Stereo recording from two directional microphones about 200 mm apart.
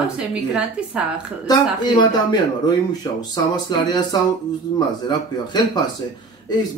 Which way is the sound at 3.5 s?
20° left (ahead or behind).